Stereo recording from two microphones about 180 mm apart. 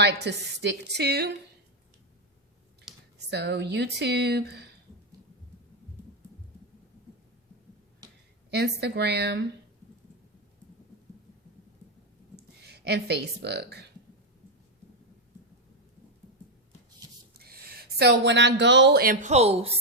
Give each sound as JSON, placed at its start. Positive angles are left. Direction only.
{"t": 0.0, "sound": "speech", "side_deg": -70}
{"t": 2.9, "sound": "a sound", "side_deg": 0}
{"t": 3.2, "sound": "speech", "side_deg": -70}
{"t": 8.4, "sound": "speech", "side_deg": -65}
{"t": 12.6, "sound": "speech", "side_deg": -65}
{"t": 17.3, "sound": "speech", "side_deg": -60}